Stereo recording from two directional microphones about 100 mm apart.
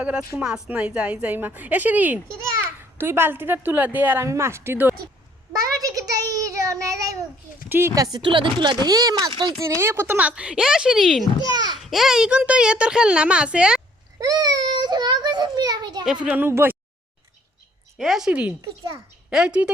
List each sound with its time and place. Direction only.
0.3 s a woman's voice: 10° right (ahead or behind)
5.5 s a sound: 35° right (ahead or behind)
7.7 s speech: 25° right (ahead or behind)
10.2 s a woman's voice: 10° right (ahead or behind)
11.5 s a child's voice: 40° right (ahead or behind)
11.9 s a woman's voice: 5° right (ahead or behind)
14.2 s a sound: 40° right (ahead or behind)
16.2 s a woman's voice: 10° right (ahead or behind)
16.5 s speech: 25° right (ahead or behind)
17.9 s a woman's voice: centre (ahead or behind)